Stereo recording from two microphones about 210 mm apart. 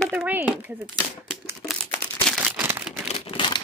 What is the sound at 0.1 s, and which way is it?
Speech, 10° right (ahead or behind).